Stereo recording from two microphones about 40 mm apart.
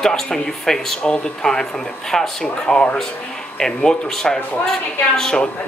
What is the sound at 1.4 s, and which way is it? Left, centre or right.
A man's voice, centre.